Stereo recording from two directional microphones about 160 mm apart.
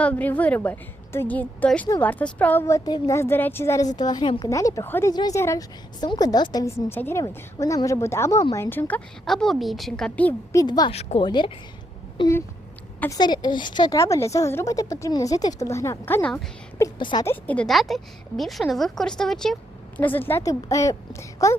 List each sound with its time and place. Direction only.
0.0 s a woman's voice: 10° left (ahead or behind)
3.9 s a woman's voice: 25° left (ahead or behind)
9.2 s a woman's voice: centre (ahead or behind)
10.6 s a woman's voice: 25° left (ahead or behind)
10.9 s a woman's voice: 40° left (ahead or behind)
11.3 s a woman's voice: 30° left (ahead or behind); by 16.8 s 10° left (ahead or behind)
16.8 s a woman's voice: 25° left (ahead or behind)
17.2 s a woman's voice: 10° left (ahead or behind)